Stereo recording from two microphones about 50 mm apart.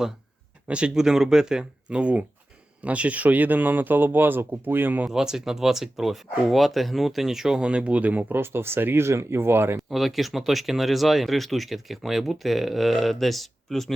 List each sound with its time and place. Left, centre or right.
0.7 s speech: right
5.0 s speech: centre; by 9.0 s right
9.0 s speech: right
9.9 s speech: centre